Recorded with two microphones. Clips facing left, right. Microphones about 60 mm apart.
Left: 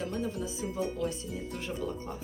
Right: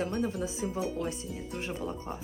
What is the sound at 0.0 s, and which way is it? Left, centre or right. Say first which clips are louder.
Speech: right 3 dB; right.